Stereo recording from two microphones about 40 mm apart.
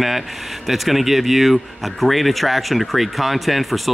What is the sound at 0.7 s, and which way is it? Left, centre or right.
Speech, centre.